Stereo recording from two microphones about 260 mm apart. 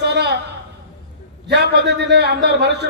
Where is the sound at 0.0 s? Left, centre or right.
Right.